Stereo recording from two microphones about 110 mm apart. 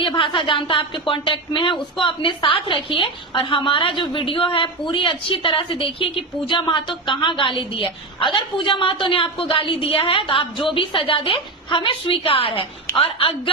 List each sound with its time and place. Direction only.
0.0 s a woman's voice: 50° left (ahead or behind)